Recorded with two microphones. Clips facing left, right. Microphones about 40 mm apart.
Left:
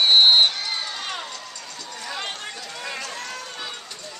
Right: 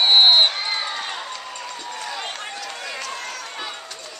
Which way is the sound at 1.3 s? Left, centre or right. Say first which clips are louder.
Right 5 dB; right.